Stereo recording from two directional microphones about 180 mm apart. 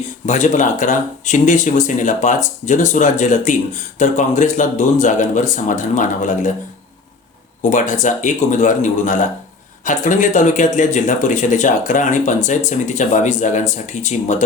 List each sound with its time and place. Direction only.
0.3 s speech: 40° left (ahead or behind)
7.7 s speech: 45° left (ahead or behind)